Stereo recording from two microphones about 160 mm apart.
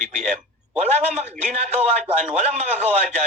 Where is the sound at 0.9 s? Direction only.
45° right (ahead or behind).